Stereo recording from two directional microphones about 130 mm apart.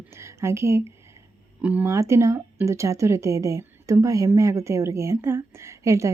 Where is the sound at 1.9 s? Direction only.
20° right (ahead or behind).